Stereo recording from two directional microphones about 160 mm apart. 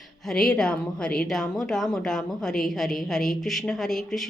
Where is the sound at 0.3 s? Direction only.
5° left (ahead or behind).